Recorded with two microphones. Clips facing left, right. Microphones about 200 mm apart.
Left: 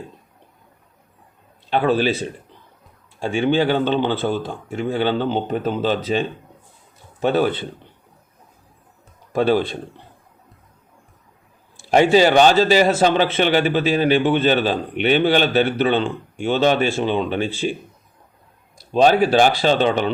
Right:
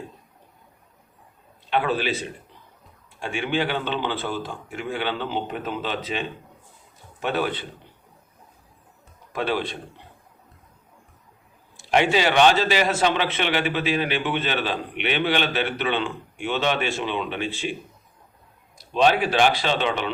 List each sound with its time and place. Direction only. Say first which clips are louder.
1.7 s a man's voice: left 6 dB; 35° left (ahead or behind)
3.2 s a man's voice: left 7 dB; 35° left (ahead or behind)
9.3 s a man's voice: left 8 dB; 35° left (ahead or behind)
11.8 s a man's voice: left 7 dB; 40° left (ahead or behind)
18.9 s a man's voice: left 5 dB; 40° left (ahead or behind)